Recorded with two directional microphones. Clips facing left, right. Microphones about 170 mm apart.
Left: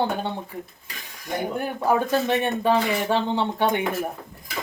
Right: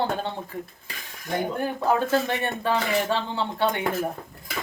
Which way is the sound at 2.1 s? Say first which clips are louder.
Left 2 dB; 15° left (ahead or behind).